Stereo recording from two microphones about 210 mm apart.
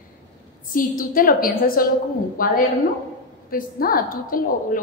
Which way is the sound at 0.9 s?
40° left (ahead or behind).